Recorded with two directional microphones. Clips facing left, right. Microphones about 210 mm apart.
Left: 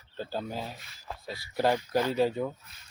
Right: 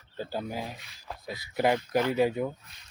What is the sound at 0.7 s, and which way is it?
Speech, centre (ahead or behind).